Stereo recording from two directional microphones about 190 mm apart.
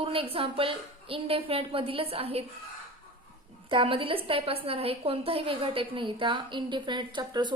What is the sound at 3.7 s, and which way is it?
A woman's voice, 30° right (ahead or behind).